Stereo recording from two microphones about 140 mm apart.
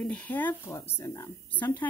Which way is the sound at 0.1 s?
10° left (ahead or behind).